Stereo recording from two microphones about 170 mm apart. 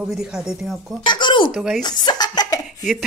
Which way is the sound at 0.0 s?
5° right (ahead or behind).